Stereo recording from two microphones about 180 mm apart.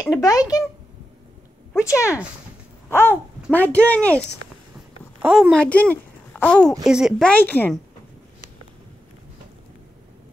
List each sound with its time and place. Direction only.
0.0 s speech: 20° left (ahead or behind)
1.7 s speech: 15° left (ahead or behind)
4.7 s a sound: 5° right (ahead or behind)
5.5 s a child's voice: 5° left (ahead or behind)